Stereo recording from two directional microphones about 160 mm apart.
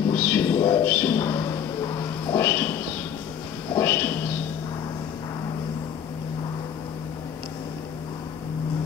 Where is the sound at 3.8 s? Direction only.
15° left (ahead or behind).